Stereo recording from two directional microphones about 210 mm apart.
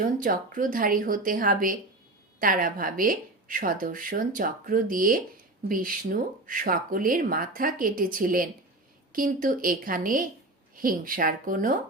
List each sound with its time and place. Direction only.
0.2 s speech: 40° right (ahead or behind)